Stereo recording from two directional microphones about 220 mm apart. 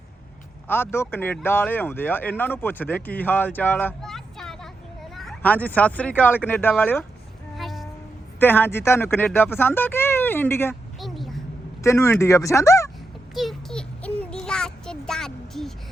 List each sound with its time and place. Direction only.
0.7 s speech: 10° left (ahead or behind)
7.5 s music: centre (ahead or behind)
8.4 s speech: 10° left (ahead or behind)
11.0 s a sound: centre (ahead or behind)
11.8 s speech: 15° left (ahead or behind)
13.3 s child singing: centre (ahead or behind)